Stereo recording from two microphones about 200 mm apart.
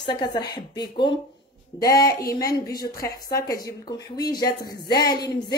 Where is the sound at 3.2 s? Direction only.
20° left (ahead or behind).